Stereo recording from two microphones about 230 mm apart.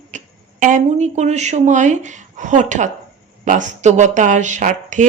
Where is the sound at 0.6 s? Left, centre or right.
Right.